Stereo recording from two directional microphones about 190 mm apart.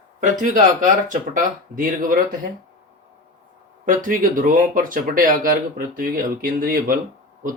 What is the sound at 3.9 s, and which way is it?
Speech, 45° right (ahead or behind).